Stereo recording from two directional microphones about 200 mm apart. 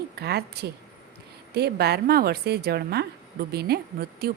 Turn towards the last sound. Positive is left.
turn(degrees=-50)  # may be behind; listen again after turning